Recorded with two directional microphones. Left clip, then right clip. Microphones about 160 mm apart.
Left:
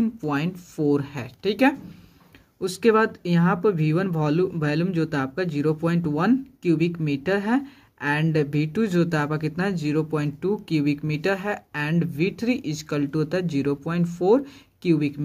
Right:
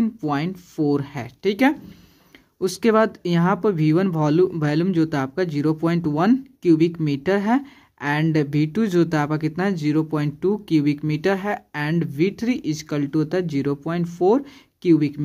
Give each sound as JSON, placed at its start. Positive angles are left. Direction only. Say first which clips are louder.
{"t": 0.0, "sound": "speech", "louder": "right 2 dB", "side_deg": -20}